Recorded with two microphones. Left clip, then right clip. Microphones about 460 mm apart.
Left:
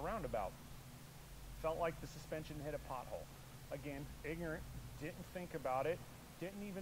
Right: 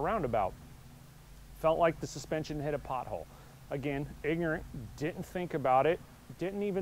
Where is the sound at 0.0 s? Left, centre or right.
Right.